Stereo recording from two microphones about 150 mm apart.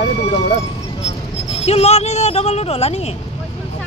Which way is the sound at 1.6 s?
45° left (ahead or behind).